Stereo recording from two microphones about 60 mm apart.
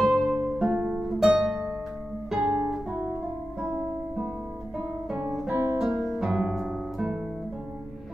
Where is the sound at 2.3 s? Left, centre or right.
Centre.